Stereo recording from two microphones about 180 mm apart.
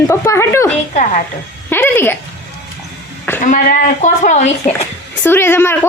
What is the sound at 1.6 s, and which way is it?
Speech, 10° left (ahead or behind).